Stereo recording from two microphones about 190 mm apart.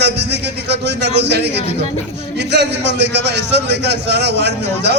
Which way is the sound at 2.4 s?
65° right (ahead or behind).